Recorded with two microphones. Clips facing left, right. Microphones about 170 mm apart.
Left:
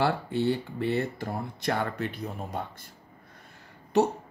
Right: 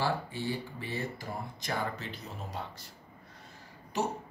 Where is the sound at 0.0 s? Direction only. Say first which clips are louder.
Left 7 dB; 65° left (ahead or behind).